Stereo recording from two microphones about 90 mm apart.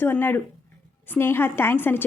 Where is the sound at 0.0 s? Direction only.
20° left (ahead or behind).